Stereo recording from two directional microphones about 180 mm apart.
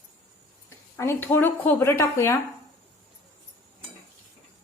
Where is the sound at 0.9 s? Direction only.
15° left (ahead or behind).